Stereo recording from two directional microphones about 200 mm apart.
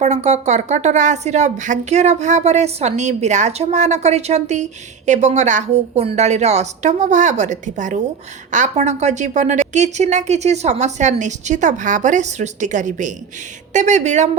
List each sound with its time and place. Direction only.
0.0 s speech: 35° right (ahead or behind)